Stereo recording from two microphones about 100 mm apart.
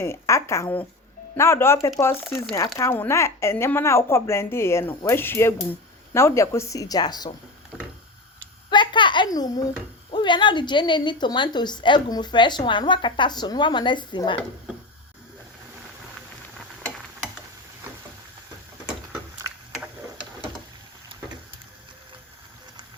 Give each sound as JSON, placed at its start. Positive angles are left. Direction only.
{"t": 0.0, "sound": "a woman's voice", "side_deg": 25}
{"t": 2.9, "sound": "a woman's voice", "side_deg": 25}
{"t": 8.7, "sound": "a woman's voice", "side_deg": 50}
{"t": 9.3, "sound": "speech", "side_deg": 40}
{"t": 10.1, "sound": "a woman's voice", "side_deg": 55}